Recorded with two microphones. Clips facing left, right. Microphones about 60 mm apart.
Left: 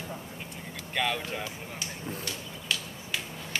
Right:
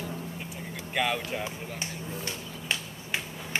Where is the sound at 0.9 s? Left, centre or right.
Centre.